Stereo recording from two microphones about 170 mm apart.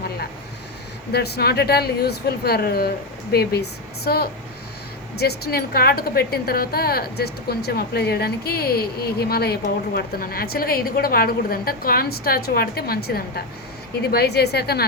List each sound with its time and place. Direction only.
1.1 s speech: 70° left (ahead or behind)